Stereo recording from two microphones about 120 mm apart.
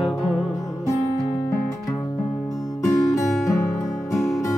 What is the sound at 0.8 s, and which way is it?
Music, 25° left (ahead or behind).